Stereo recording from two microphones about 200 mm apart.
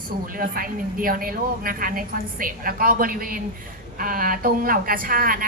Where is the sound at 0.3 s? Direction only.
45° right (ahead or behind).